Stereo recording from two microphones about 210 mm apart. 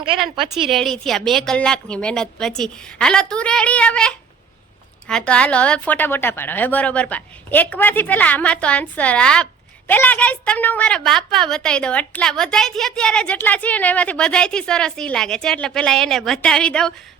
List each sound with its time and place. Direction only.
0.0 s a woman's voice: 25° right (ahead or behind)
0.3 s a woman's voice: centre (ahead or behind)